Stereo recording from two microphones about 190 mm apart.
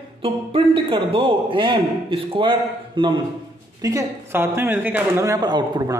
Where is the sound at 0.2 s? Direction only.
30° right (ahead or behind).